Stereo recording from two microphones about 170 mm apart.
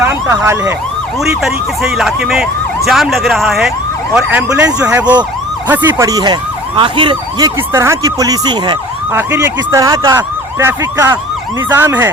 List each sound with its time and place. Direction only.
0.0 s speech: 15° right (ahead or behind)
1.2 s speech: centre (ahead or behind)
4.5 s emergency vehicle: 5° right (ahead or behind); by 8.8 s 25° right (ahead or behind)
9.1 s emergency vehicle: 15° right (ahead or behind)